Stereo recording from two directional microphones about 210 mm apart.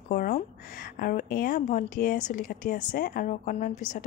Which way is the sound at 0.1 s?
40° left (ahead or behind).